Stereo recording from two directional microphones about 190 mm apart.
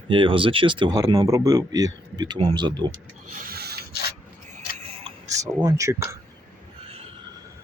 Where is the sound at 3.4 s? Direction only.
55° right (ahead or behind).